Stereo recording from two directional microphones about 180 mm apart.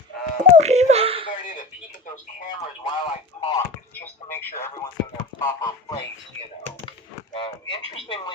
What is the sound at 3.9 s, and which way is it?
Speech, 10° left (ahead or behind).